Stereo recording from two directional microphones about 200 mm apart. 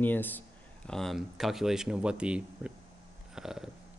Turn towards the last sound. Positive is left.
turn(degrees=0)  # may be behind; listen again after turning